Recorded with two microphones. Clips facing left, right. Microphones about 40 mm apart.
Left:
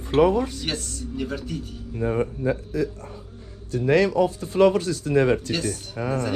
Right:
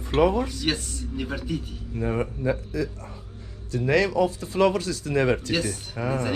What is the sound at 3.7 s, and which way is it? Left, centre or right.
Speech, right.